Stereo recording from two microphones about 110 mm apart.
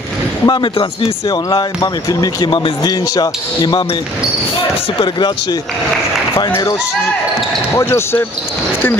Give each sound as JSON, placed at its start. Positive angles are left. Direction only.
{"t": 0.5, "sound": "speech", "side_deg": 45}
{"t": 5.0, "sound": "speech", "side_deg": 40}
{"t": 7.7, "sound": "speech", "side_deg": 25}